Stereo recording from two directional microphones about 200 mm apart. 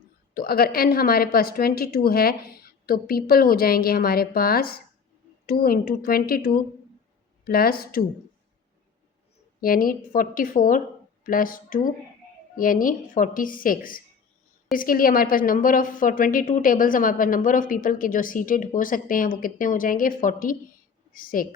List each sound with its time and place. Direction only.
0.3 s a woman's voice: 50° left (ahead or behind)
9.6 s a woman's voice: 45° left (ahead or behind)